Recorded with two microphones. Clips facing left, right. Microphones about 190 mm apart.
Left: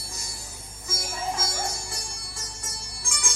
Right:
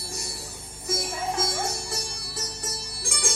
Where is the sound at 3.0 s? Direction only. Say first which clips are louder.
Right 5 dB; 65° right (ahead or behind).